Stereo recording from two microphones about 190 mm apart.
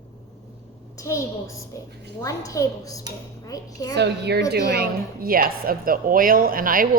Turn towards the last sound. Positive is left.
turn(degrees=-45)  # may be behind; listen again after turning